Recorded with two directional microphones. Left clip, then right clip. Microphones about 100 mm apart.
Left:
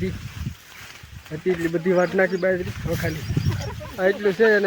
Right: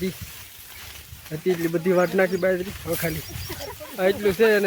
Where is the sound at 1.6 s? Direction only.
15° right (ahead or behind).